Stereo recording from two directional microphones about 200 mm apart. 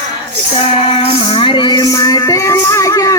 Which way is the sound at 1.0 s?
25° left (ahead or behind).